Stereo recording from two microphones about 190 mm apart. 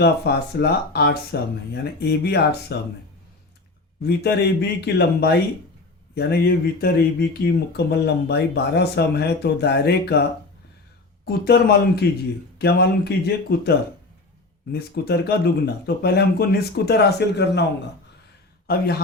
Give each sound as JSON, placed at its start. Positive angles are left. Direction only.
{"t": 0.0, "sound": "speech", "side_deg": 60}
{"t": 4.0, "sound": "speech", "side_deg": 60}
{"t": 11.3, "sound": "speech", "side_deg": 55}
{"t": 18.7, "sound": "speech", "side_deg": 55}